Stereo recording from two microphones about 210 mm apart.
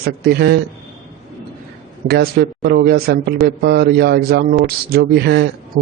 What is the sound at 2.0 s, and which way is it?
A man's voice, 50° right (ahead or behind).